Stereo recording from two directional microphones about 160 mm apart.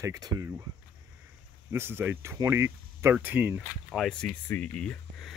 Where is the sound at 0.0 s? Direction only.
20° right (ahead or behind).